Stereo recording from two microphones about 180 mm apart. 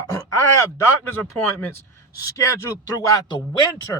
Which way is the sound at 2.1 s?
20° left (ahead or behind).